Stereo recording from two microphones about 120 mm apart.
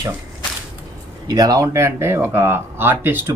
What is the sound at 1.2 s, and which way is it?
Speech, 35° right (ahead or behind).